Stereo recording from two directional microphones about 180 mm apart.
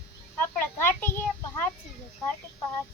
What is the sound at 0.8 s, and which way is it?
Speech, 10° left (ahead or behind).